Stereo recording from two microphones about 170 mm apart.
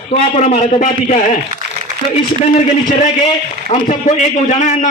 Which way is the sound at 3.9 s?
45° left (ahead or behind).